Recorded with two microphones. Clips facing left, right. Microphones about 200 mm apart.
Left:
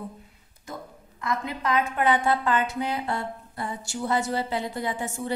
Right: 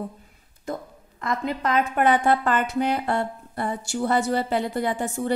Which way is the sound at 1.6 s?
55° right (ahead or behind).